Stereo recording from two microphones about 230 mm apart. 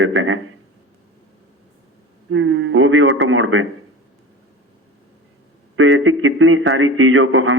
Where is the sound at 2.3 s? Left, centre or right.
Right.